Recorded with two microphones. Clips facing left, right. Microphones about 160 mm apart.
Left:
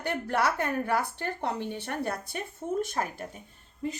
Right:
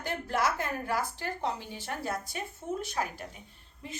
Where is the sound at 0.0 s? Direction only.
65° left (ahead or behind).